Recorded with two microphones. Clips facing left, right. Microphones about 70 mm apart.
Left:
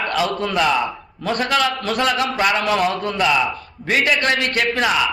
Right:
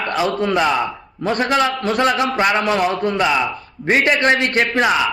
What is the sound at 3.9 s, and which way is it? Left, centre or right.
Speech, right.